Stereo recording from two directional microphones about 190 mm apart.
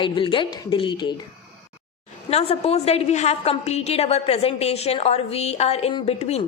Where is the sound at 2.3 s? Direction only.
30° left (ahead or behind).